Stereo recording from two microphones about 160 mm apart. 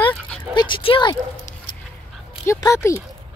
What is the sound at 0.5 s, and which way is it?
Speech, 30° left (ahead or behind).